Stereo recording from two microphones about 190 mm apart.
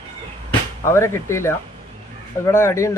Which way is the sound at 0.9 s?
15° left (ahead or behind).